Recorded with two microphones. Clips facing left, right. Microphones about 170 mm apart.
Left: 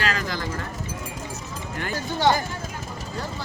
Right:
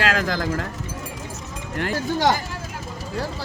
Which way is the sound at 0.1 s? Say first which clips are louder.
Right 5 dB; 90° right.